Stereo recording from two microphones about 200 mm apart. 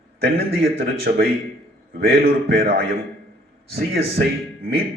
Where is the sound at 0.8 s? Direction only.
50° right (ahead or behind).